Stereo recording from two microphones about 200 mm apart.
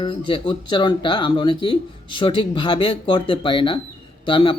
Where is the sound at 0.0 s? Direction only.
25° left (ahead or behind).